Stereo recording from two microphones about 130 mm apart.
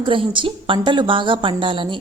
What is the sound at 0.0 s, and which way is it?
Speech, 40° right (ahead or behind).